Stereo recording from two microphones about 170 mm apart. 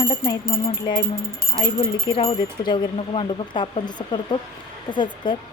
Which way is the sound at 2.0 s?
30° left (ahead or behind).